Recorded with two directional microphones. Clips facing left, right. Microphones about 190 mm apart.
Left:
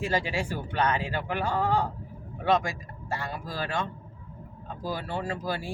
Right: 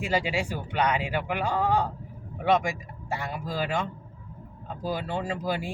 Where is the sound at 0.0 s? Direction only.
15° right (ahead or behind).